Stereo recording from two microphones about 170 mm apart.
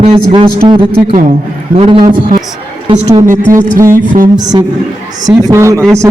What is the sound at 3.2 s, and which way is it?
Speech, 50° right (ahead or behind).